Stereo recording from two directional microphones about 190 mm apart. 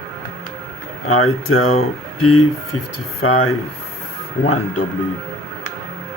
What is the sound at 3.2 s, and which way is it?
Speech, 90° left.